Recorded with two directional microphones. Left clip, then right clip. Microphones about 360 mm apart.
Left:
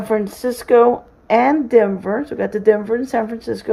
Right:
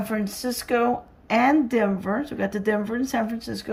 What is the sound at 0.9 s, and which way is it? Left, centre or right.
Speech, centre.